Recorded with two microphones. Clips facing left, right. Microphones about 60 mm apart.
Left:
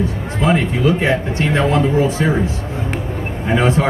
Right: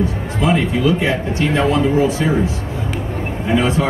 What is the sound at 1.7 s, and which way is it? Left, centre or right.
Speech, left.